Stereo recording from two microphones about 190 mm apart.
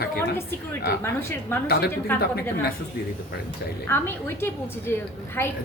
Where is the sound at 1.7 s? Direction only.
55° left (ahead or behind).